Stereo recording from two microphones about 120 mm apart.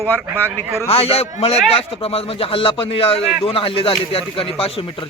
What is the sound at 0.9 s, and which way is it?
Speech, 55° left (ahead or behind).